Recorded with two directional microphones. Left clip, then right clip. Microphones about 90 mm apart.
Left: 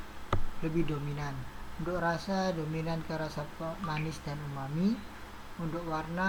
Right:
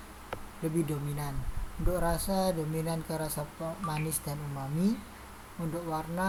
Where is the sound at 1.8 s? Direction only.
30° right (ahead or behind).